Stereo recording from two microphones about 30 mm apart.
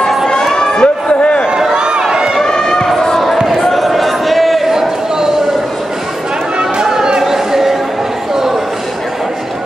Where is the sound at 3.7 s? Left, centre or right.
Centre.